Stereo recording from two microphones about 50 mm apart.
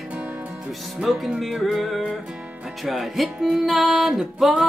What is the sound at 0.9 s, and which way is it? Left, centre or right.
Music, centre.